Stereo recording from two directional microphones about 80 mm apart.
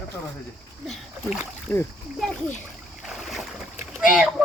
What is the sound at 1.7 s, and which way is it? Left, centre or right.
Speech, centre.